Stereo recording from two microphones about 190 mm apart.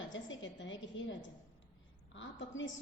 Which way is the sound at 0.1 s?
75° left (ahead or behind).